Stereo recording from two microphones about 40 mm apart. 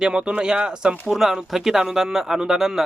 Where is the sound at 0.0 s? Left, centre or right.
Right.